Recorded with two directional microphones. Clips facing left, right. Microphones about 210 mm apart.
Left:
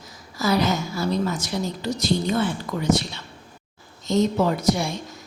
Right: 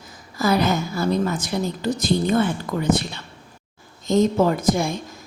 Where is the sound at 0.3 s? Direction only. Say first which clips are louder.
Right 2 dB; 55° right (ahead or behind).